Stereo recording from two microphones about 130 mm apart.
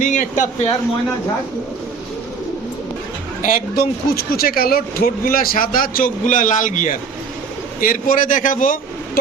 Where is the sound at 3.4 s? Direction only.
90° left.